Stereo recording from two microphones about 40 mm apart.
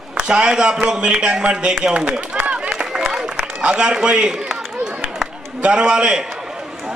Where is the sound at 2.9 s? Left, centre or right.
Centre.